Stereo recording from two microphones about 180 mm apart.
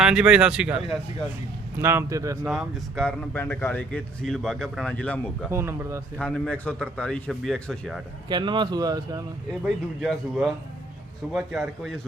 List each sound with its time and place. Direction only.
0.0 s a man's voice: 5° right (ahead or behind)
2.5 s speech: centre (ahead or behind)
5.5 s speech: 15° right (ahead or behind)
6.1 s a man's voice: 5° left (ahead or behind)
8.3 s speech: 25° right (ahead or behind)
9.6 s a man's voice: centre (ahead or behind)